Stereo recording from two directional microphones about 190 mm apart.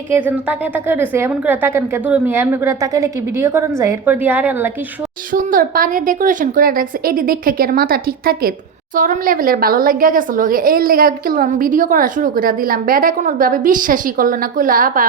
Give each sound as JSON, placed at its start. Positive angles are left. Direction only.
{"t": 0.1, "sound": "a woman's voice", "side_deg": -10}
{"t": 5.3, "sound": "a woman's voice", "side_deg": -45}